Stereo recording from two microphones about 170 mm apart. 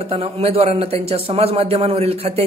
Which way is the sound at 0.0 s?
35° right (ahead or behind).